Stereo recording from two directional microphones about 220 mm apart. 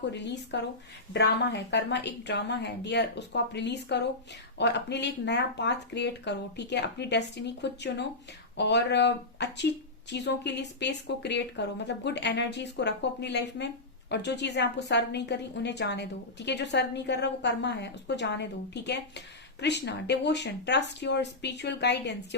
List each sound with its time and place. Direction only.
0.1 s a woman's voice: 50° left (ahead or behind)